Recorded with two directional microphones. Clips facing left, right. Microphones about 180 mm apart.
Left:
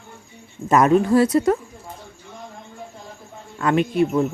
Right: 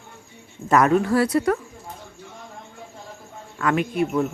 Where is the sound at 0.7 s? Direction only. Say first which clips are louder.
Left 3 dB; 20° left (ahead or behind).